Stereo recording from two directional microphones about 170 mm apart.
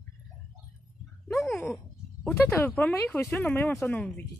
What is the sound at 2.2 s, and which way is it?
Speech, 15° left (ahead or behind).